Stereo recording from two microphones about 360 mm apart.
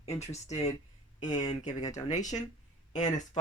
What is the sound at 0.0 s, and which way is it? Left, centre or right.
Speech, centre.